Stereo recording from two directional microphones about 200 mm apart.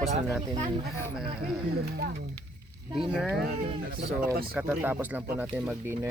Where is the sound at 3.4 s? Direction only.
50° right (ahead or behind).